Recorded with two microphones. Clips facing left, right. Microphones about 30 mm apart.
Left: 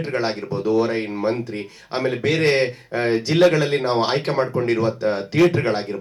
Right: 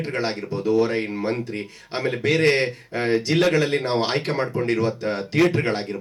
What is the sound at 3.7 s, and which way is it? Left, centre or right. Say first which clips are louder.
Speech: left 2 dB; left.